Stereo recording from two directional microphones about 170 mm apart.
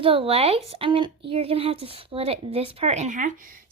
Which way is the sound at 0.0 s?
30° right (ahead or behind).